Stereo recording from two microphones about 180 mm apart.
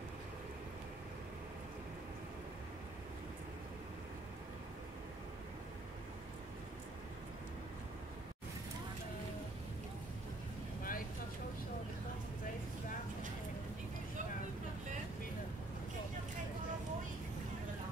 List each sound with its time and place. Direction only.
10.8 s vehicle: 50° left (ahead or behind)